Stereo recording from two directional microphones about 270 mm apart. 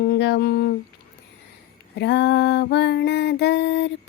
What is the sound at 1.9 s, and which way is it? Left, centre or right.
Mantra, left.